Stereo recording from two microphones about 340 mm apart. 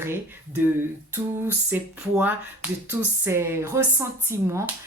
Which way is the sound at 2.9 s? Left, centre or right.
Centre.